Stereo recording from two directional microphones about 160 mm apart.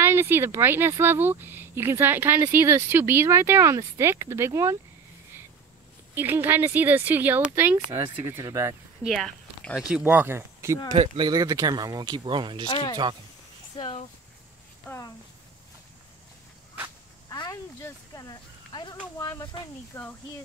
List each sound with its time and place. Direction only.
0.0 s speech: 15° right (ahead or behind)
6.1 s speech: 10° right (ahead or behind)
9.0 s speech: centre (ahead or behind); by 12.6 s 30° right (ahead or behind)
12.6 s speech: 30° left (ahead or behind)
17.3 s a sound: 20° left (ahead or behind)
19.1 s speech: 20° left (ahead or behind)